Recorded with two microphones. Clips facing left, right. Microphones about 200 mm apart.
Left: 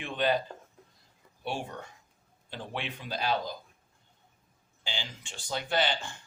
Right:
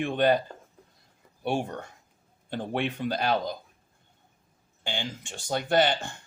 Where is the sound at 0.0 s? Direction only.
50° right (ahead or behind).